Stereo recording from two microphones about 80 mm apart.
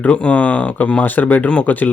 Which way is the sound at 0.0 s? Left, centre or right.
Centre.